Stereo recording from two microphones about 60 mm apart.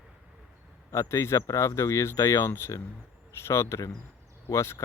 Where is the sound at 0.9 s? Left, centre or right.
Left.